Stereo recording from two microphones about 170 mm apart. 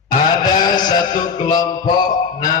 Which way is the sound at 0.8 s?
25° left (ahead or behind).